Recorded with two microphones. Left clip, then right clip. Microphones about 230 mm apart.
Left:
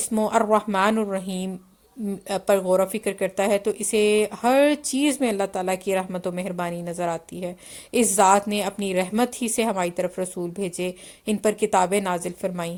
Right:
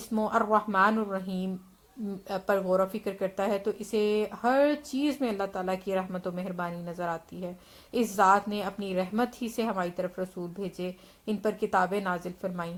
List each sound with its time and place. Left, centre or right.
0.1 s a woman's voice: left